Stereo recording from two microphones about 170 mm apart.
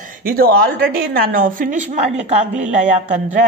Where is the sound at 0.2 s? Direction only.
60° right (ahead or behind).